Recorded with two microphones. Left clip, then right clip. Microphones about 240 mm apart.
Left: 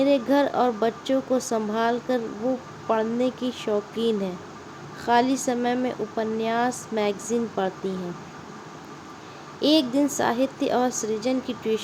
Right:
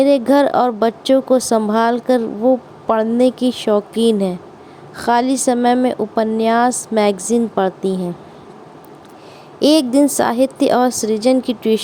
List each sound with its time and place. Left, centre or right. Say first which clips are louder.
0.0 s speech: right 8 dB; right
9.6 s speech: right 8 dB; right